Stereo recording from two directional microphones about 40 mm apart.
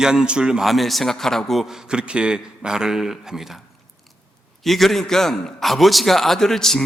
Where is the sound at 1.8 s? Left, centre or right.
Right; by 3.6 s centre.